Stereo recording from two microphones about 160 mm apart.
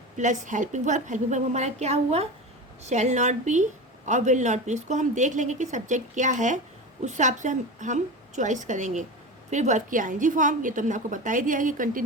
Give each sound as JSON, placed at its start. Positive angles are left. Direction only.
{"t": 0.2, "sound": "a woman's voice", "side_deg": -50}